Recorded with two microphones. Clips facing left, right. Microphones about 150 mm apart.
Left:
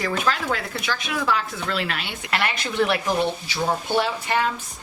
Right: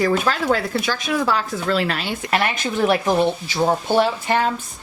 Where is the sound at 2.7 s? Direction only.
40° right (ahead or behind).